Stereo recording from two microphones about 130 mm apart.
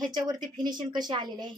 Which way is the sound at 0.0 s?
30° right (ahead or behind).